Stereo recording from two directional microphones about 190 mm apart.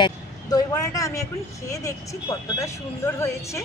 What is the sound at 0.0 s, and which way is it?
A man's voice, 20° left (ahead or behind).